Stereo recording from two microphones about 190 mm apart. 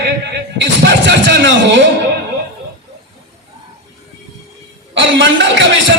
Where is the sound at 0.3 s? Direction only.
65° right (ahead or behind).